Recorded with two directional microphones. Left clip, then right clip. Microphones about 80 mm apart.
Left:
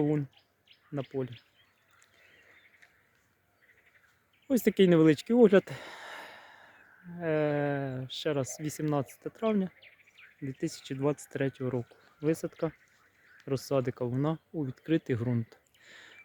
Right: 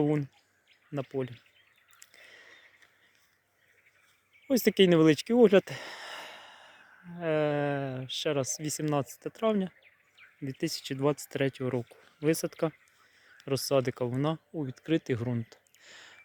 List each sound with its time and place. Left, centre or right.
0.0 s speech: centre
4.4 s speech: centre
10.2 s a sound: left
10.6 s speech: centre
13.5 s speech: centre
14.6 s speech: left
15.8 s a sound: centre